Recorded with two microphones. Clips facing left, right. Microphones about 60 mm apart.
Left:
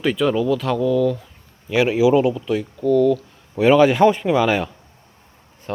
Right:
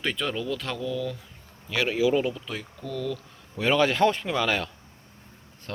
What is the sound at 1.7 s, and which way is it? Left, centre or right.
Speech, centre.